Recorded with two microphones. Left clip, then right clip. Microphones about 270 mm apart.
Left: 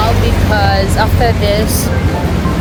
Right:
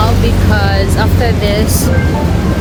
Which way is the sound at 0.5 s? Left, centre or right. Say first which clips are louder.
Left 4 dB; centre.